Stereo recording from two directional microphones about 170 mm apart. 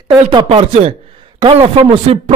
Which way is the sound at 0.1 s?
25° right (ahead or behind).